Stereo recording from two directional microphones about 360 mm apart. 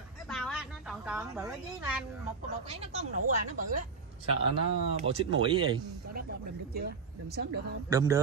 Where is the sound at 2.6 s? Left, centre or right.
Centre.